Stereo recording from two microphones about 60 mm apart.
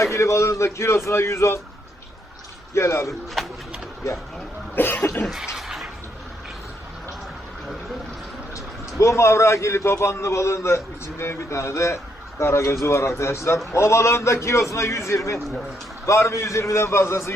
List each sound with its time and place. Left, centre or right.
0.0 s a man's voice: left
2.7 s speech: left
4.7 s cough: left
5.2 s a sound: centre
9.0 s a man's voice: left